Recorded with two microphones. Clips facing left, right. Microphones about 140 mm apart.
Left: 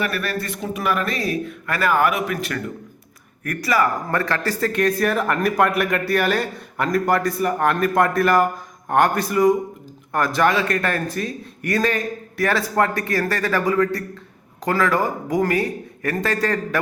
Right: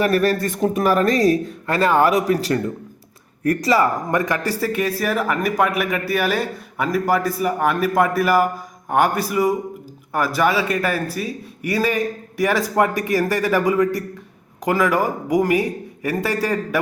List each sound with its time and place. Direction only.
0.0 s speech: 40° right (ahead or behind)
4.1 s a man's voice: 15° right (ahead or behind)